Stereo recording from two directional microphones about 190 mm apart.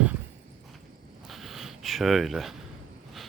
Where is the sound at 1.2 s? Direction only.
Centre (ahead or behind).